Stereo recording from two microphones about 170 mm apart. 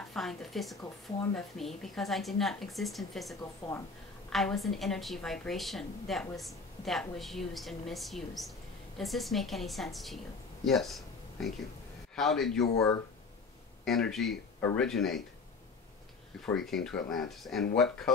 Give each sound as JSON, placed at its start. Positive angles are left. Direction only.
{"t": 0.1, "sound": "a woman's voice", "side_deg": 0}
{"t": 3.6, "sound": "speech", "side_deg": 35}
{"t": 4.3, "sound": "a woman's voice", "side_deg": 0}
{"t": 10.6, "sound": "a sound", "side_deg": 0}
{"t": 12.2, "sound": "a woman's voice", "side_deg": 0}
{"t": 13.8, "sound": "a woman's voice", "side_deg": 0}
{"t": 16.4, "sound": "a woman's voice", "side_deg": 5}